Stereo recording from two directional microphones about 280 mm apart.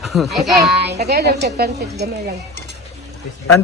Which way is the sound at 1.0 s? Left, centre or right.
Right.